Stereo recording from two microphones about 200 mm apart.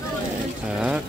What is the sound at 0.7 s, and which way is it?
Speech, 5° right (ahead or behind).